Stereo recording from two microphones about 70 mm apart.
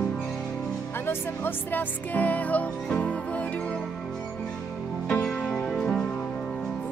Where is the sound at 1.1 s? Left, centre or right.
Left.